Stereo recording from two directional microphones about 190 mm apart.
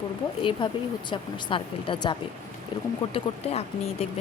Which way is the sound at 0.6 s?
25° left (ahead or behind).